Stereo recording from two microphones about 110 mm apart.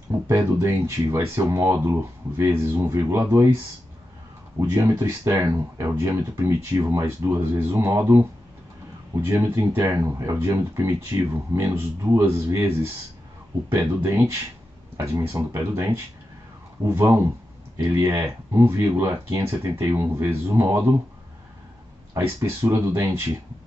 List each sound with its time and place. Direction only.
0.6 s speech: 25° right (ahead or behind)
4.6 s speech: 25° right (ahead or behind)
22.1 s speech: 25° right (ahead or behind)